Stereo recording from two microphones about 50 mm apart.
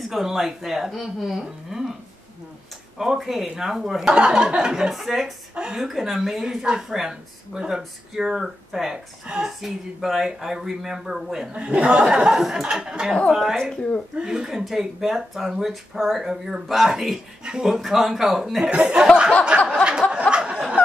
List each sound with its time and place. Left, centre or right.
0.0 s speech: centre
3.0 s a woman's voice: centre
5.5 s a woman's voice: centre
11.5 s speech: right
12.3 s a woman's voice: centre
18.7 s speech: right
19.7 s a sound: centre